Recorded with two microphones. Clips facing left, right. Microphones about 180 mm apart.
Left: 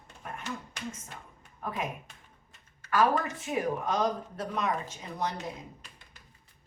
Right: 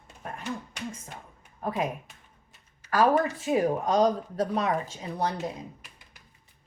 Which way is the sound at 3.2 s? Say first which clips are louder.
Right 6 dB; 35° right (ahead or behind).